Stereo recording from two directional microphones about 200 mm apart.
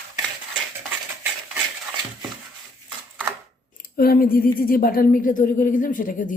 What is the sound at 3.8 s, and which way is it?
Speech, 50° left (ahead or behind).